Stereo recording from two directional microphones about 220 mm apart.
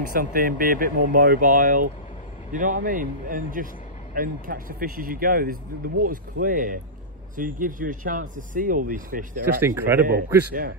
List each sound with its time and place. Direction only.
0.1 s speech: 40° right (ahead or behind)
9.6 s a man's voice: 10° right (ahead or behind)
10.0 s speech: 40° right (ahead or behind)